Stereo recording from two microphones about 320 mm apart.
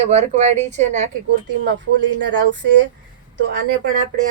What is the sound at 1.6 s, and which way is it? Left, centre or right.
Speech, right.